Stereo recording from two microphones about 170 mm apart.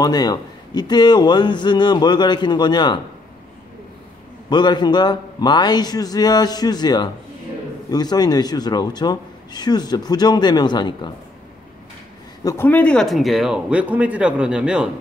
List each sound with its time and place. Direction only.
0.0 s speech: 25° left (ahead or behind)
4.5 s speech: 25° left (ahead or behind)
12.4 s speech: 10° left (ahead or behind); by 14.9 s 5° right (ahead or behind)